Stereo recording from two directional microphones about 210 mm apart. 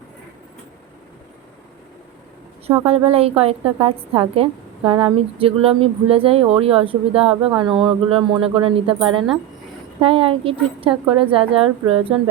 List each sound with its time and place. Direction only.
2.8 s speech: 25° right (ahead or behind)